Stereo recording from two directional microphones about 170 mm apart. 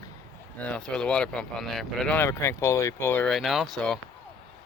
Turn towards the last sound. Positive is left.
turn(degrees=5)  # may be behind; listen again after turning